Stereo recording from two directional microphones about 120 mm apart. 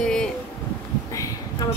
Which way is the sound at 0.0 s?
5° left (ahead or behind).